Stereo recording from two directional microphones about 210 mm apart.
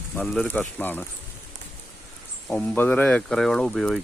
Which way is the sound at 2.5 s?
10° left (ahead or behind).